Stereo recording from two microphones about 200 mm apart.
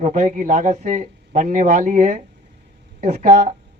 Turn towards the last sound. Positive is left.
turn(degrees=-35)  # may be behind; listen again after turning